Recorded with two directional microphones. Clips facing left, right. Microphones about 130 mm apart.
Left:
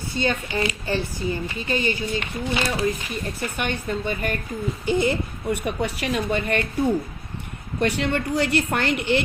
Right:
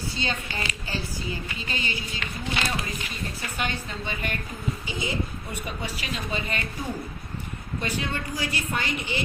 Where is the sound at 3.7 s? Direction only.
50° left (ahead or behind).